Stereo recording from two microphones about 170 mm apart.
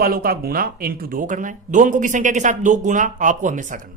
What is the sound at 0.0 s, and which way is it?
Speech, 60° right (ahead or behind).